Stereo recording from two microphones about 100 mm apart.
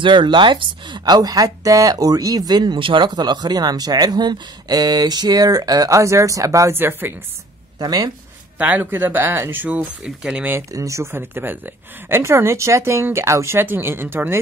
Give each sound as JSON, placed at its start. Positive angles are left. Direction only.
{"t": 0.0, "sound": "speech", "side_deg": -50}
{"t": 7.8, "sound": "speech", "side_deg": -40}
{"t": 8.5, "sound": "speech", "side_deg": -15}
{"t": 10.0, "sound": "speech", "side_deg": -10}
{"t": 10.7, "sound": "speech", "side_deg": -30}